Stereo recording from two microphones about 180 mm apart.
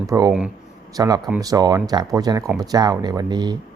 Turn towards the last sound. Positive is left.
turn(degrees=-25)  # may be behind; listen again after turning